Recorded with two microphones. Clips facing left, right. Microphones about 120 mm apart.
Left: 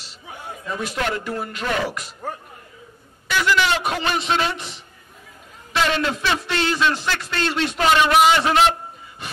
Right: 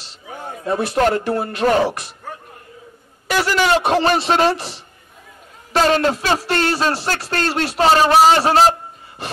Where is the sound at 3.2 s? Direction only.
40° right (ahead or behind).